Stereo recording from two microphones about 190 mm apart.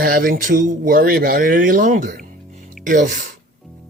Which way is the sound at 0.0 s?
50° right (ahead or behind).